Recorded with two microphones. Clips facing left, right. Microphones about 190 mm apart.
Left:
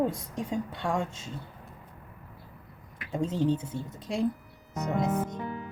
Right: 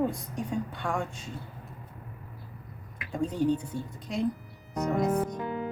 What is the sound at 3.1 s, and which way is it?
Speech, 25° left (ahead or behind).